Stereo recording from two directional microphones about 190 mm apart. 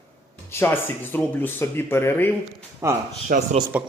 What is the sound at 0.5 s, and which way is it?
Speech, 10° left (ahead or behind).